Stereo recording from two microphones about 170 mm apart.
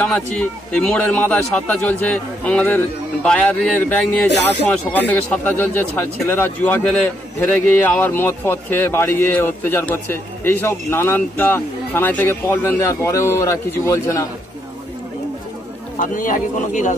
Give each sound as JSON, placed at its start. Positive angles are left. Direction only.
{"t": 0.0, "sound": "speech", "side_deg": 5}
{"t": 16.0, "sound": "speech", "side_deg": 50}